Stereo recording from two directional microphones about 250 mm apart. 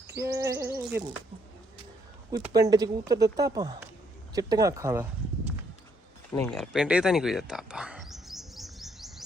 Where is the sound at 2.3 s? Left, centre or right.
Centre.